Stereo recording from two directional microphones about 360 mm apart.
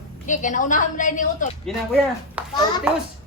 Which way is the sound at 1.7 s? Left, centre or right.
Centre.